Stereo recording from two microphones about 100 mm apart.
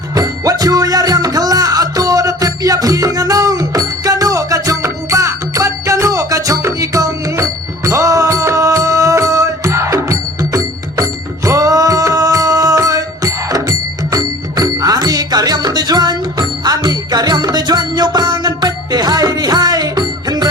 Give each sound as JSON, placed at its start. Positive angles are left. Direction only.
{"t": 0.1, "sound": "music", "side_deg": -35}